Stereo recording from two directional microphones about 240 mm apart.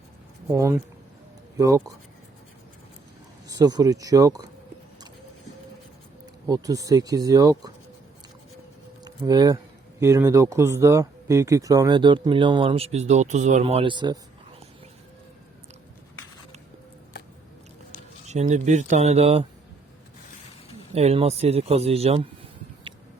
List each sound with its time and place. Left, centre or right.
0.5 s speech: centre
3.5 s speech: centre
6.5 s speech: centre
9.0 s speech: centre
18.3 s speech: right
20.9 s speech: right